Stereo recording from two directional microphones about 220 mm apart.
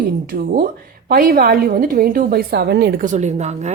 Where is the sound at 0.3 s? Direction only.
40° right (ahead or behind).